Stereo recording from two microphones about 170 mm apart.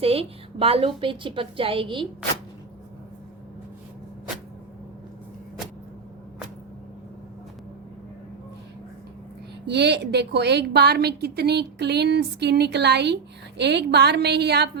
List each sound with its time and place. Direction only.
0.0 s a woman's voice: 35° right (ahead or behind)
9.6 s a woman's voice: 80° right